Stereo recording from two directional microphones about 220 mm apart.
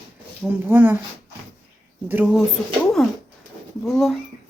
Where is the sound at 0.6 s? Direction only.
10° right (ahead or behind).